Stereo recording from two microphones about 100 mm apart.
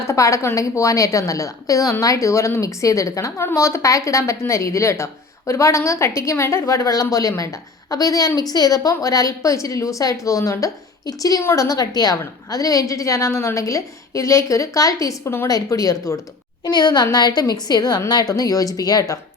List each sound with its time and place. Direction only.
0.1 s a woman's voice: 30° left (ahead or behind)
15.4 s a woman's voice: 35° left (ahead or behind)
16.6 s a woman's voice: 45° left (ahead or behind)